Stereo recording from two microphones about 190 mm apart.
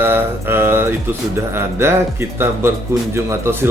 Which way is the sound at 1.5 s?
15° right (ahead or behind).